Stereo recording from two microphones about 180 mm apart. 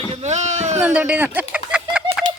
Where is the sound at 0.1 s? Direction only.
40° right (ahead or behind).